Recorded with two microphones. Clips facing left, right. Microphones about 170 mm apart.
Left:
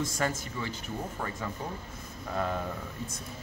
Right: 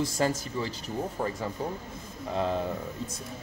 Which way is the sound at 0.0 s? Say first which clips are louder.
Right 4 dB; 35° right (ahead or behind).